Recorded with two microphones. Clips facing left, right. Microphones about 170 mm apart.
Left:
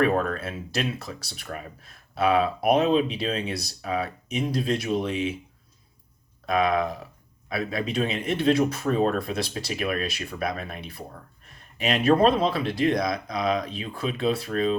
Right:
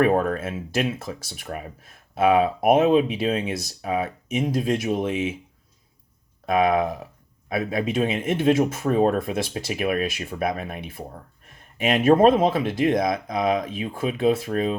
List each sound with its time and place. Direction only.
0.1 s speech: 50° right (ahead or behind)
6.4 s speech: 50° right (ahead or behind)